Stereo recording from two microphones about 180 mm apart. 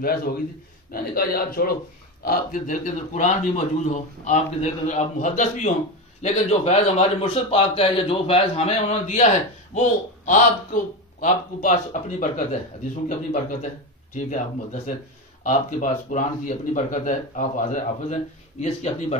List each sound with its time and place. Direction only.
0.0 s a man's voice: 55° left (ahead or behind); by 19.1 s 40° left (ahead or behind)